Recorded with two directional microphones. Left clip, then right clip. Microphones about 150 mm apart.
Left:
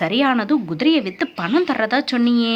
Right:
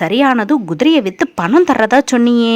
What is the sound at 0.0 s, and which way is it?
Speech, 45° right (ahead or behind).